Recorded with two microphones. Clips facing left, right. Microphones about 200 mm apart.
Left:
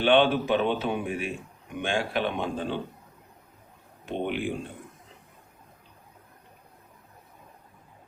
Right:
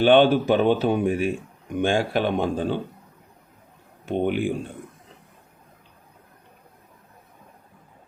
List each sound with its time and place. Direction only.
0.0 s speech: 40° right (ahead or behind)
4.1 s speech: 45° right (ahead or behind)